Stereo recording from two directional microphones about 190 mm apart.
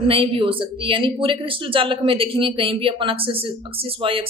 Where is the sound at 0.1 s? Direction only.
30° right (ahead or behind).